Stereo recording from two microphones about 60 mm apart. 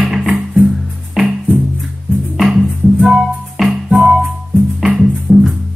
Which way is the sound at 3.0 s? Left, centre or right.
Centre.